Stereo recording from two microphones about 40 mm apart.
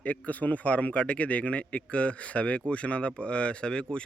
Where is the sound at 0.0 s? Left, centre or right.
Left.